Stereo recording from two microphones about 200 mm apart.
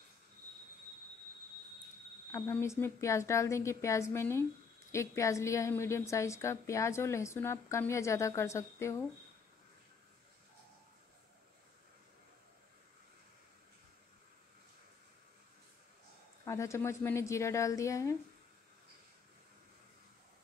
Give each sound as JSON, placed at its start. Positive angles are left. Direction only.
{"t": 2.3, "sound": "a woman's voice", "side_deg": 15}
{"t": 16.4, "sound": "a woman's voice", "side_deg": 15}